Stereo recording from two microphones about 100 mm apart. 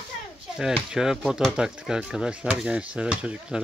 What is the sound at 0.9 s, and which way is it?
Speech, 5° right (ahead or behind).